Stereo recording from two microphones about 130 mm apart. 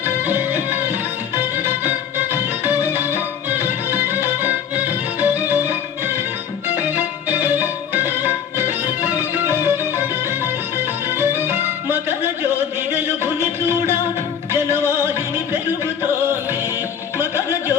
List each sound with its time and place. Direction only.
0.3 s music: 15° right (ahead or behind)
1.6 s music: 15° right (ahead or behind)
6.9 s music: 15° right (ahead or behind)
16.2 s music: 15° right (ahead or behind)